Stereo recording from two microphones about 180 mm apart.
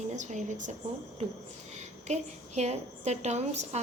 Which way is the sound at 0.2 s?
40° right (ahead or behind).